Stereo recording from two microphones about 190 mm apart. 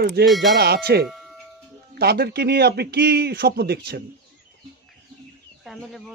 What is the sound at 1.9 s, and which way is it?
Speech, 55° right (ahead or behind).